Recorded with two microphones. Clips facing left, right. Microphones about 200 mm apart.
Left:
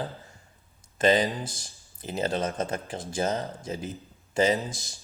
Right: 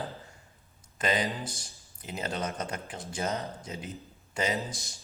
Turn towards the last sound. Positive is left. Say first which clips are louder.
# left 1 dB
turn(degrees=0)  # may be behind; listen again after turning